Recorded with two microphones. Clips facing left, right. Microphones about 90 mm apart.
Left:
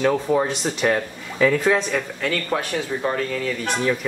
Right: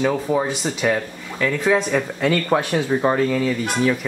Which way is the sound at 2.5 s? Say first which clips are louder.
Right 5 dB; 40° right (ahead or behind).